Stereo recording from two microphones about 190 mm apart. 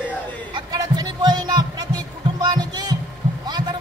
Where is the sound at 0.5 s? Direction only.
20° right (ahead or behind).